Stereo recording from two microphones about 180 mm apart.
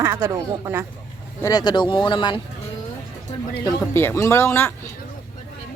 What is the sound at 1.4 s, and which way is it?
Speech, 20° left (ahead or behind).